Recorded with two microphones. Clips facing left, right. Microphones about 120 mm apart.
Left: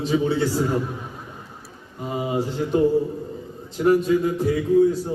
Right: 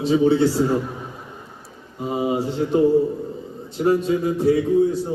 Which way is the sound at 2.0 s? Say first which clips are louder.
Right 3 dB; 20° right (ahead or behind).